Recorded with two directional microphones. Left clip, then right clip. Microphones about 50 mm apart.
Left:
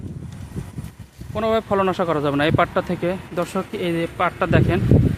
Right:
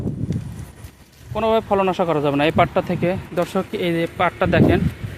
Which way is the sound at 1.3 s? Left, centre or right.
Centre.